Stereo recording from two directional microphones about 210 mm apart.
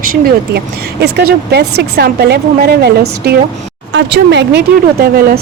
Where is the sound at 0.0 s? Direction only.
45° right (ahead or behind).